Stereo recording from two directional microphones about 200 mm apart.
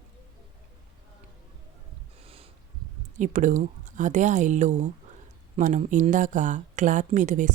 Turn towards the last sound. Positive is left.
turn(degrees=-40)  # may be behind; listen again after turning